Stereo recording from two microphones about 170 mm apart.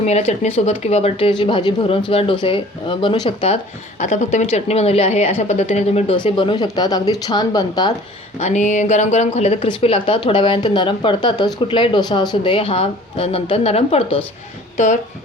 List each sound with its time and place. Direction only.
0.0 s a woman's voice: 40° left (ahead or behind)
6.1 s speech: 25° left (ahead or behind)
8.4 s a woman's voice: 40° left (ahead or behind)